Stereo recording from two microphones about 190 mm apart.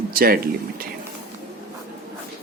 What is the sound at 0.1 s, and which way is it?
Speech, 50° right (ahead or behind).